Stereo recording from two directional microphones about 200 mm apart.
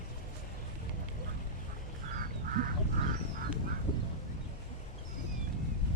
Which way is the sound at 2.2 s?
45° right (ahead or behind).